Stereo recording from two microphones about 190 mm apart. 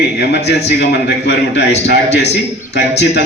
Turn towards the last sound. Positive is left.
turn(degrees=65)  # may be behind; listen again after turning